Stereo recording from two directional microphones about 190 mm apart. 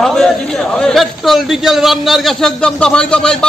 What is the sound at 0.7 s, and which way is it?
A man's voice, centre (ahead or behind).